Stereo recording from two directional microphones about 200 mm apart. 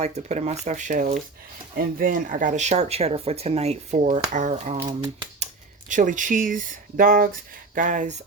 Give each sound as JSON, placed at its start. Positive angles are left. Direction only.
{"t": 0.0, "sound": "speech", "side_deg": -35}
{"t": 4.8, "sound": "speech", "side_deg": -20}
{"t": 5.9, "sound": "speech", "side_deg": -40}